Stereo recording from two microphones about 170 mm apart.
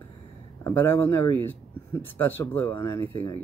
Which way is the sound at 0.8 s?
15° left (ahead or behind).